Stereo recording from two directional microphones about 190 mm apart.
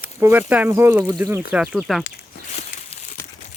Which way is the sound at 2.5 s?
35° left (ahead or behind).